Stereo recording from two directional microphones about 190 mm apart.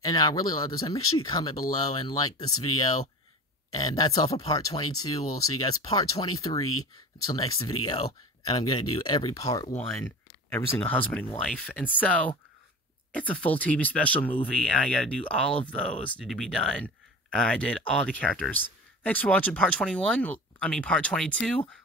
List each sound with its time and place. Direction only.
0.0 s speech: 20° left (ahead or behind)
6.7 s speech: 90° left
7.3 s speech: 20° left (ahead or behind)
9.8 s a sound: 10° left (ahead or behind)
10.8 s speech: 10° left (ahead or behind)